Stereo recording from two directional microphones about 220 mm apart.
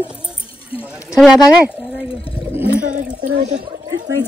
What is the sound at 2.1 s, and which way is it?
Speech, 25° left (ahead or behind).